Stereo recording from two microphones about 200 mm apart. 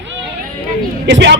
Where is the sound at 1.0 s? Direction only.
60° right (ahead or behind).